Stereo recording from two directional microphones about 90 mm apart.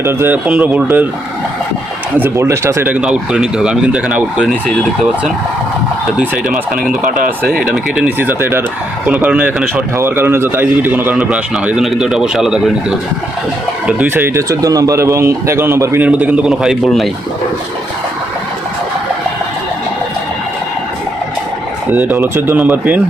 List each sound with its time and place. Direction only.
0.0 s speech: 25° right (ahead or behind)
0.4 s speech: 15° right (ahead or behind)
2.1 s speech: 25° right (ahead or behind)
2.8 s speech: 15° right (ahead or behind)
6.1 s speech: 10° right (ahead or behind)
10.0 s speech: 25° right (ahead or behind)
11.1 s speech: 10° right (ahead or behind)
13.8 s speech: 20° right (ahead or behind)
14.5 s a man's voice: 40° right (ahead or behind)
16.0 s speech: 15° right (ahead or behind)
21.8 s speech: 20° right (ahead or behind)